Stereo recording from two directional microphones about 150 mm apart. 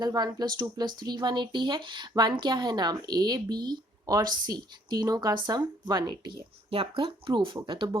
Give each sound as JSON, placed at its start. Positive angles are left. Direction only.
{"t": 0.0, "sound": "speech", "side_deg": -25}